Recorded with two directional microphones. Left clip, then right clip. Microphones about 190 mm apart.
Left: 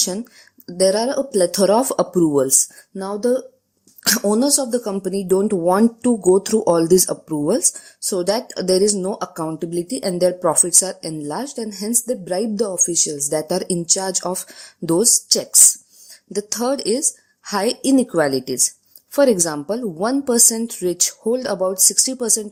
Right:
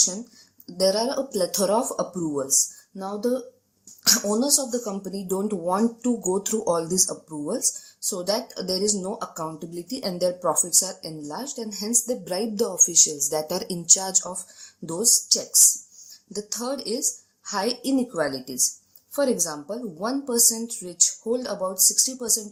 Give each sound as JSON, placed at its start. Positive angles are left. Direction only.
{"t": 0.8, "sound": "a woman's voice", "side_deg": 45}